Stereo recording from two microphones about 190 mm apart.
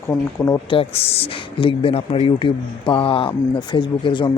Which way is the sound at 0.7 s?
30° left (ahead or behind).